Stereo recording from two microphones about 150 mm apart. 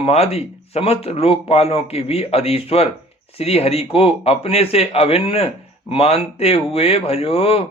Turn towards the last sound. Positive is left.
turn(degrees=40)  # may be behind; listen again after turning